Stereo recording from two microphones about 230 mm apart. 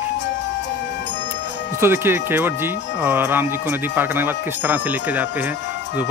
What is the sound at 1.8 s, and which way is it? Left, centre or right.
Speech, centre.